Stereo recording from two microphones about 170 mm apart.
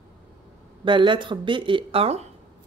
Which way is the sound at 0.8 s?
30° right (ahead or behind).